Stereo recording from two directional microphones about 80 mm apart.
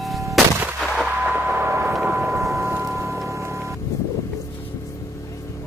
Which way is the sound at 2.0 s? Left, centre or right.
Right.